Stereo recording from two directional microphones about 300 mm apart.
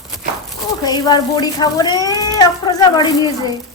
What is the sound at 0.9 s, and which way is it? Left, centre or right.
Speech, centre.